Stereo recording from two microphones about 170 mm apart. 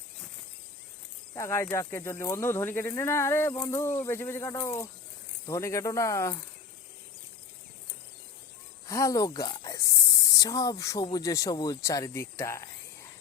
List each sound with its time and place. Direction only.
1.3 s speech: 15° left (ahead or behind)
8.9 s speech: 20° left (ahead or behind)